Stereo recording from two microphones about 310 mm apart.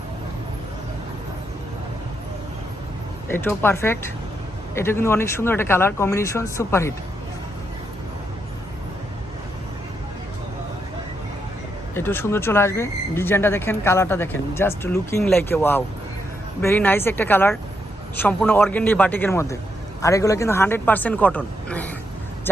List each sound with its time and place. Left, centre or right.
3.2 s speech: centre
11.9 s a man's voice: centre